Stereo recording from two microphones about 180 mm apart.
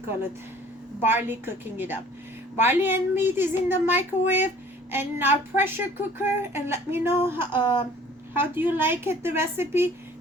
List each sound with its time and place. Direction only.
1.0 s speech: 10° right (ahead or behind)
7.5 s speech: 25° left (ahead or behind)
8.4 s speech: 10° right (ahead or behind)